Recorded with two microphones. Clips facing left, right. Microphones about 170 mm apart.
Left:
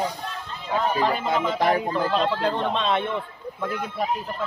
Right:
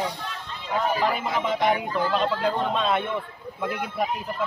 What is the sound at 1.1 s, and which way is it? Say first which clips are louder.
Speech: left 2 dB; 35° left (ahead or behind).